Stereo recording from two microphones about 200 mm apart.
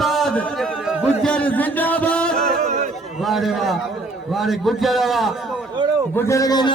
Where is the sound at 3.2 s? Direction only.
Centre (ahead or behind).